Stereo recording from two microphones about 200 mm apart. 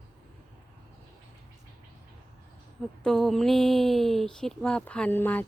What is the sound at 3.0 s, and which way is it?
Speech, centre (ahead or behind).